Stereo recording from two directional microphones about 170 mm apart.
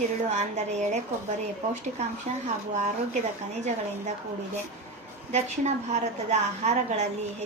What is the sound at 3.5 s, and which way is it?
Speech, 45° right (ahead or behind).